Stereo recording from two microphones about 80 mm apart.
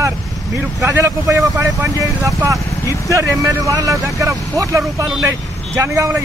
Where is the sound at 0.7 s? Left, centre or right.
Right.